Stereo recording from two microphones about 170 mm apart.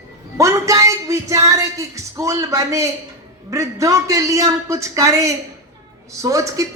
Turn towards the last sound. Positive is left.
turn(degrees=-20)  # may be behind; listen again after turning